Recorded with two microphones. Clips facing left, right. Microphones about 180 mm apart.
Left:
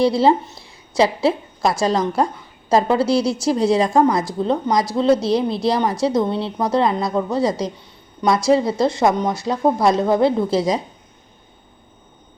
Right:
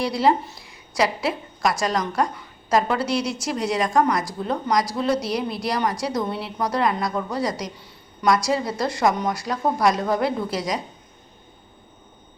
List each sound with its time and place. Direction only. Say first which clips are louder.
0.0 s a woman's voice: left 5 dB; 30° left (ahead or behind)